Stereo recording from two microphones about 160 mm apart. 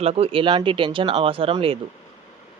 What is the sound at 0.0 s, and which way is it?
Speech, 40° right (ahead or behind).